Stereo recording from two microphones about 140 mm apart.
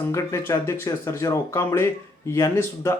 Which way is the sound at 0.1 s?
20° left (ahead or behind).